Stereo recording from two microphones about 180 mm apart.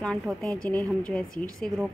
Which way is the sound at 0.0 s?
5° left (ahead or behind).